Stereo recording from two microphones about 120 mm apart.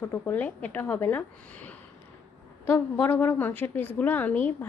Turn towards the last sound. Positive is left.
turn(degrees=15)  # may be behind; listen again after turning